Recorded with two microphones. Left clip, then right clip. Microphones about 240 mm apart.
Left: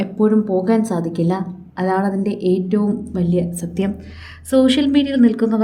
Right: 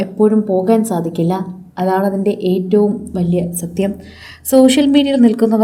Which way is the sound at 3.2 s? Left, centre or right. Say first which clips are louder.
Right 2 dB; left.